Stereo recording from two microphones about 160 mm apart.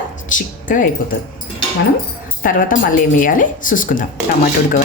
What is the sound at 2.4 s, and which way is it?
Speech, 60° left (ahead or behind).